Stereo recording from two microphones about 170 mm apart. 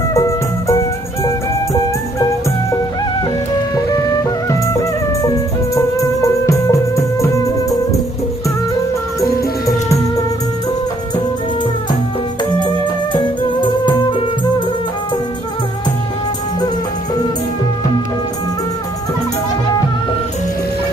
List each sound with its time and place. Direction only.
0.1 s music: 20° left (ahead or behind)
5.2 s music: 20° left (ahead or behind)
13.1 s music: 25° left (ahead or behind)